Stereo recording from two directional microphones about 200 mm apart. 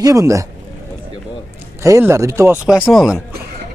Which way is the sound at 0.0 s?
15° right (ahead or behind).